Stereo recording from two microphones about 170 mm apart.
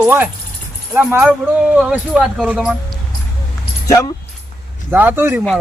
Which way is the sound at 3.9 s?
20° left (ahead or behind).